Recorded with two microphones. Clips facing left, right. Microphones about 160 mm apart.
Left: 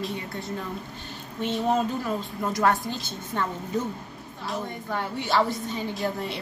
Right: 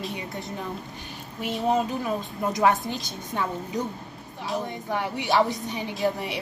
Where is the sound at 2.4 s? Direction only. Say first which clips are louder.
Right 2 dB; 20° right (ahead or behind).